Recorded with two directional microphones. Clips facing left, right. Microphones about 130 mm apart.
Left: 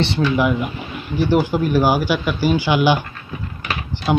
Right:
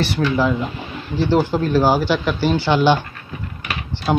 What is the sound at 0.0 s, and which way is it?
Speech, 20° left (ahead or behind).